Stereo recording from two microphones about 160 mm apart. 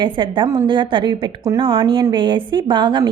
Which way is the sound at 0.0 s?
30° right (ahead or behind).